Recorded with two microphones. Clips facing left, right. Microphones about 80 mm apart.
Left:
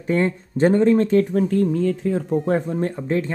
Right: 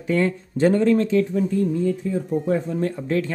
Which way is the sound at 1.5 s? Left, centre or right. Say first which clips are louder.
Left 2 dB; left.